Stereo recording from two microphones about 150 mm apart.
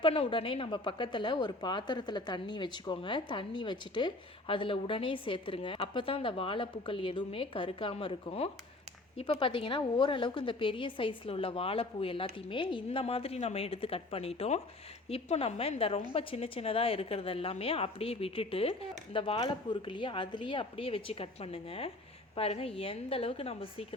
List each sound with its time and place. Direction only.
0.0 s a woman's voice: 35° left (ahead or behind)